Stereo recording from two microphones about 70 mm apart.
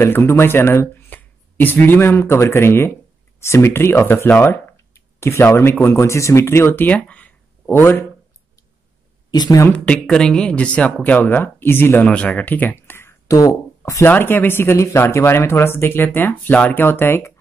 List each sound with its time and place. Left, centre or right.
0.0 s speech: left
1.1 s a sound: left
2.0 s speech: left
4.7 s a sound: left
5.6 s speech: left; by 7.7 s centre
7.7 s speech: left
9.3 s speech: left
9.7 s speech: centre
12.1 s speech: left
13.3 s speech: left
14.0 s speech: left